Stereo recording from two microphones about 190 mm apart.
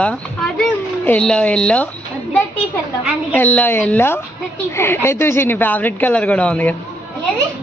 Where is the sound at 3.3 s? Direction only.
10° left (ahead or behind).